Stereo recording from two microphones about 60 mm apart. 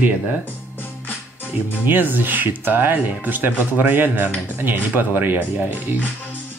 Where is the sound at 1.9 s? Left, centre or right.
Right.